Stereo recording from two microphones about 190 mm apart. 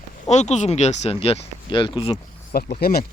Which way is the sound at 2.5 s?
55° left (ahead or behind).